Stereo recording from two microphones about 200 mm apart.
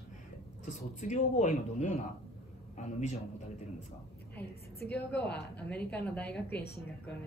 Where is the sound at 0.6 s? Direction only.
35° left (ahead or behind).